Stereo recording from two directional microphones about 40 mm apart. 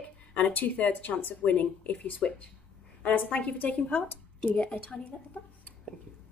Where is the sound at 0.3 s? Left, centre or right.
Left.